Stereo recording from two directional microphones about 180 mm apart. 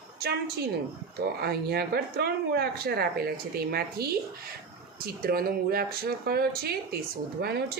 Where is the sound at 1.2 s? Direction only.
60° right (ahead or behind).